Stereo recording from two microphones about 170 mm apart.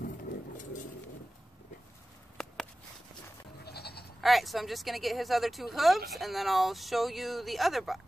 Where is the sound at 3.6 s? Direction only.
70° left (ahead or behind).